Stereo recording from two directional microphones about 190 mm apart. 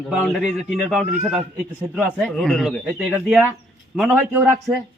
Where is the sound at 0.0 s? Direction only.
Centre (ahead or behind).